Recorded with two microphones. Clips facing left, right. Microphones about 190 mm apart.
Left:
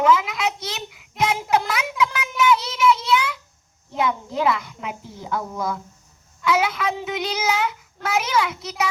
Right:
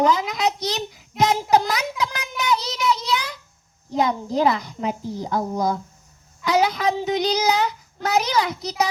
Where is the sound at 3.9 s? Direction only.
40° right (ahead or behind).